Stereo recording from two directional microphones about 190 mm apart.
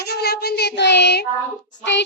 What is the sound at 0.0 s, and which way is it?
Child singing, 55° left (ahead or behind).